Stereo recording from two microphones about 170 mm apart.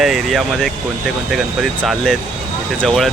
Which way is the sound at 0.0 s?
Centre (ahead or behind).